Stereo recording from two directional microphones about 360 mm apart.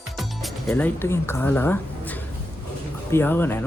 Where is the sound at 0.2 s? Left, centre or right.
Centre.